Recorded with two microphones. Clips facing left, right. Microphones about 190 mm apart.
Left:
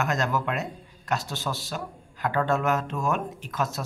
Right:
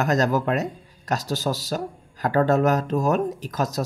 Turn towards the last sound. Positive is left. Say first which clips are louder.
# right 4 dB
turn(degrees=-40)  # may be behind; listen again after turning